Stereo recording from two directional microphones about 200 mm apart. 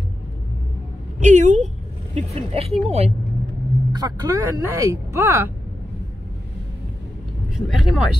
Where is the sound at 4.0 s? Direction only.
20° right (ahead or behind).